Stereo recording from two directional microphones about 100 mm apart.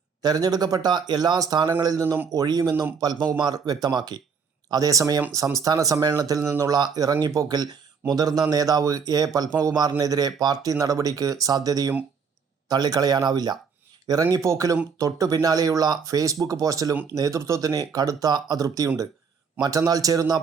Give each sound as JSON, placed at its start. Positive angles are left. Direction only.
{"t": 0.2, "sound": "speech", "side_deg": -40}